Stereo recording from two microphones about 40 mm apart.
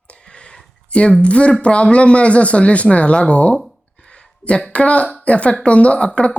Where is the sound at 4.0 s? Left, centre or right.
Left.